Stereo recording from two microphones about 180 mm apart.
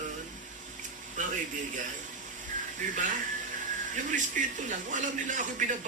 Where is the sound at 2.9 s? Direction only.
45° right (ahead or behind).